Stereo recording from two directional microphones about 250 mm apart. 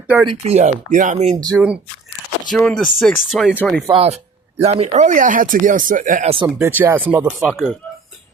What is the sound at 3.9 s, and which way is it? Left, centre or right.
Speech, right.